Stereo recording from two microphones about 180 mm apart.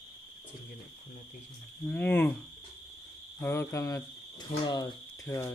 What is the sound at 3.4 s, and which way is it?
Speech, 15° left (ahead or behind).